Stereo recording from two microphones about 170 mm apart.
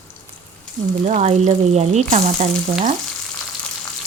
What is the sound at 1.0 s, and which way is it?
Speech, 45° right (ahead or behind).